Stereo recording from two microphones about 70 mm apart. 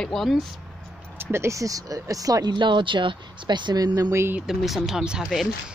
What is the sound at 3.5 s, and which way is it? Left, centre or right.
Speech, right.